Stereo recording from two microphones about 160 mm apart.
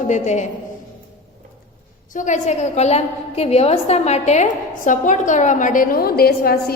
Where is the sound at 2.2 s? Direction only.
50° left (ahead or behind).